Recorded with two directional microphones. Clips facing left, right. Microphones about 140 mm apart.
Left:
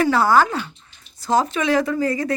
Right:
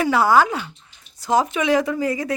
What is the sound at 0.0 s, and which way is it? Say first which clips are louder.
Speech: even; 10° right (ahead or behind).